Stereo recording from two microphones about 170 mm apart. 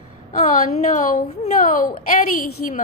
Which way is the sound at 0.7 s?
45° left (ahead or behind).